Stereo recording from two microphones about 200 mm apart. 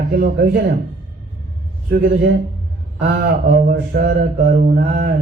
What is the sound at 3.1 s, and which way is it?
Mantra, 50° right (ahead or behind).